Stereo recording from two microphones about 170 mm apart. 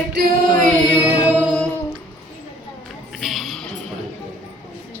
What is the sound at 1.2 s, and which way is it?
Music, 10° right (ahead or behind).